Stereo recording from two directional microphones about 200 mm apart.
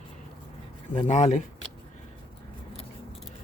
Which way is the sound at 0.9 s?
35° left (ahead or behind).